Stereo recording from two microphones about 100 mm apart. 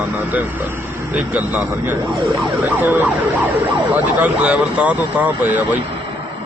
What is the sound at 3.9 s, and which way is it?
Speech, 15° right (ahead or behind).